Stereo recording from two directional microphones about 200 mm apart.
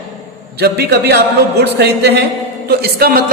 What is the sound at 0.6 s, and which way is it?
A woman's voice, 55° right (ahead or behind).